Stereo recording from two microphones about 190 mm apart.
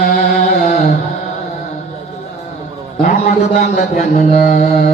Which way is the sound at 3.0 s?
45° left (ahead or behind).